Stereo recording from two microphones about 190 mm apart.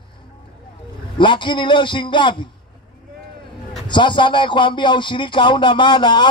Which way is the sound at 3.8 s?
25° left (ahead or behind).